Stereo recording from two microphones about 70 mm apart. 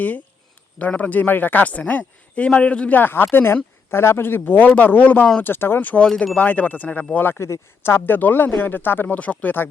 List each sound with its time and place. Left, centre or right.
0.8 s speech: left
7.2 s speech: left